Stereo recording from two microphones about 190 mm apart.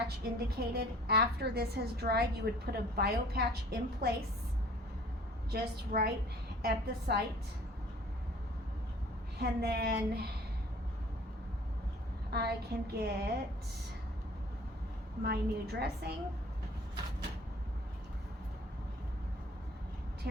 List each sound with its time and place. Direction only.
0.3 s a woman's voice: 55° right (ahead or behind)
5.5 s a woman's voice: 55° right (ahead or behind)
9.4 s a woman's voice: 60° right (ahead or behind)
12.3 s a woman's voice: 55° right (ahead or behind)
15.2 s a woman's voice: 55° right (ahead or behind)
20.2 s vehicle: 55° right (ahead or behind)